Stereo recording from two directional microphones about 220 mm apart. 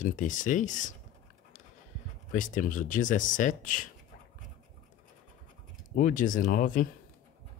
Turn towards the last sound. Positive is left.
turn(degrees=35)  # may be behind; listen again after turning